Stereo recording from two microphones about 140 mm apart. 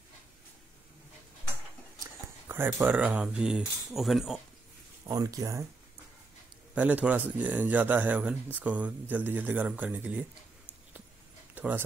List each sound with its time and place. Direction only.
2.4 s speech: 15° right (ahead or behind)
5.0 s speech: 25° right (ahead or behind)
6.7 s speech: 10° right (ahead or behind)
11.5 s a sound: 15° right (ahead or behind)